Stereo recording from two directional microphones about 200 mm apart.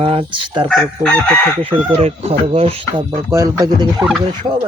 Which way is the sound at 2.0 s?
30° right (ahead or behind).